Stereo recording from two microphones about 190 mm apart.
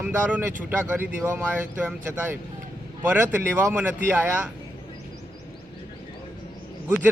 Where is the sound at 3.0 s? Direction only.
10° right (ahead or behind).